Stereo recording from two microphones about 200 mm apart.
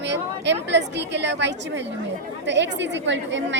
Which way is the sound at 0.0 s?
60° right (ahead or behind).